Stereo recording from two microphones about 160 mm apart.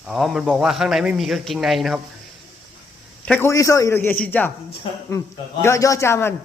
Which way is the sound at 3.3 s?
15° left (ahead or behind).